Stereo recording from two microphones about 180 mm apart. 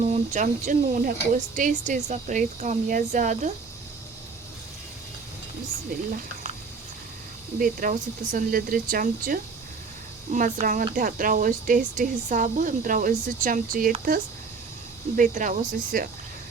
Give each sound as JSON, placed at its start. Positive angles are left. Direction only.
{"t": 0.0, "sound": "speech", "side_deg": -40}
{"t": 7.6, "sound": "speech", "side_deg": -50}
{"t": 15.1, "sound": "speech", "side_deg": -45}